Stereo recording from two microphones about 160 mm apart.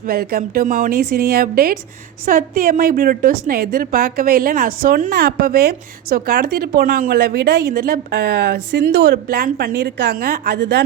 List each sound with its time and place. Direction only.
0.0 s a woman's voice: 65° right (ahead or behind); by 10.8 s 90° right